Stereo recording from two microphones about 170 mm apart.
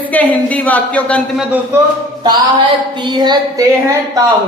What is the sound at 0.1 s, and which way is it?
Speech, 10° left (ahead or behind).